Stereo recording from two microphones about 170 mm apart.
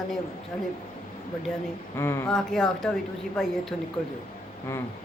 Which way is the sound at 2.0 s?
15° left (ahead or behind).